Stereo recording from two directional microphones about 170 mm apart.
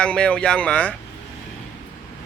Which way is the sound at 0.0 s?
5° left (ahead or behind).